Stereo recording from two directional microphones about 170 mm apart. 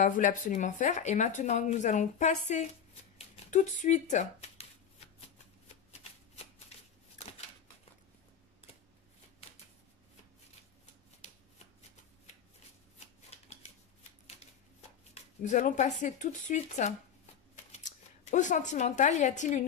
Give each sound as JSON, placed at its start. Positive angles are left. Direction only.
{"t": 0.0, "sound": "speech", "side_deg": 50}
{"t": 3.4, "sound": "shuffling cards", "side_deg": 45}
{"t": 11.1, "sound": "shuffling cards", "side_deg": 40}
{"t": 13.0, "sound": "shuffling cards", "side_deg": 40}
{"t": 14.8, "sound": "speech", "side_deg": 45}